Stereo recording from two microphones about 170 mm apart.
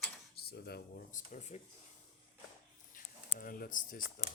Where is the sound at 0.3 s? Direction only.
70° left (ahead or behind).